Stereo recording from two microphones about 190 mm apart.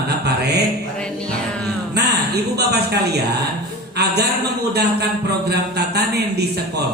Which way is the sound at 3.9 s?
60° right (ahead or behind).